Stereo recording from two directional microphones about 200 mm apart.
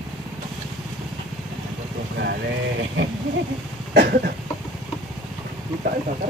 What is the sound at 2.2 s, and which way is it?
Speech, 60° right (ahead or behind).